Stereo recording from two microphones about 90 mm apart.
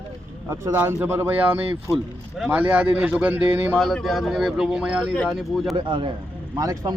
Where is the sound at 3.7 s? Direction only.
Centre (ahead or behind).